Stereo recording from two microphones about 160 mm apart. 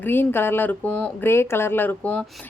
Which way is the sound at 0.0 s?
15° left (ahead or behind).